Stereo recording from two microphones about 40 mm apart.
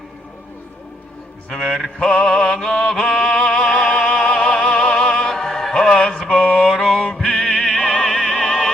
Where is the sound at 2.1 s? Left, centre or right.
Left.